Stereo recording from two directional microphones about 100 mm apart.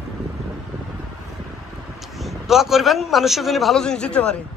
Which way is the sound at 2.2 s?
Centre (ahead or behind).